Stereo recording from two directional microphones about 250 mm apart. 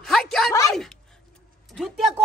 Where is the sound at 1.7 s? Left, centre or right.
Centre.